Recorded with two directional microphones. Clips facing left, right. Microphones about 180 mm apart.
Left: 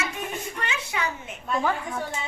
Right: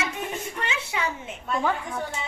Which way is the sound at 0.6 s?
25° right (ahead or behind).